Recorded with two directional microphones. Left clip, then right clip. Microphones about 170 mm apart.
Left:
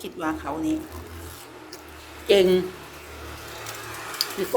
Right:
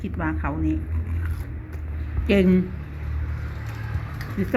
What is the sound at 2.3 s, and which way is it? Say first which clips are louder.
Speech: left 3 dB; 20° left (ahead or behind).